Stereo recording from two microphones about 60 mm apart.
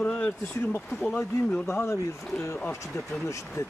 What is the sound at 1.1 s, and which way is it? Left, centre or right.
Speech, left.